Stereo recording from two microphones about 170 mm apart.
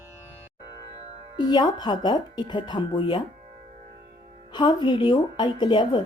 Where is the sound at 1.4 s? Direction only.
25° left (ahead or behind).